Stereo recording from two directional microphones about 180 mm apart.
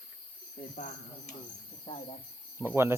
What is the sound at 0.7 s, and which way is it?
Speech, 45° left (ahead or behind).